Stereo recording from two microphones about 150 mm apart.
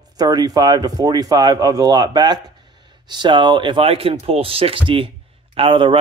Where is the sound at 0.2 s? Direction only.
25° right (ahead or behind).